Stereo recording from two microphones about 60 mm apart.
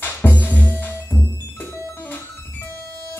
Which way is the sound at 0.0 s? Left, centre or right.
Left.